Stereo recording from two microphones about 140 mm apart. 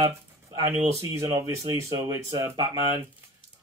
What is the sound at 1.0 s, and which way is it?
Speech, 25° right (ahead or behind).